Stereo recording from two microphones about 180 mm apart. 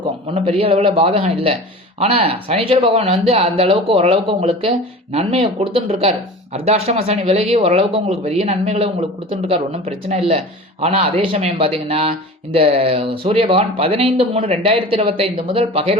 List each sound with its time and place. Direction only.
0.0 s a man's voice: 30° right (ahead or behind)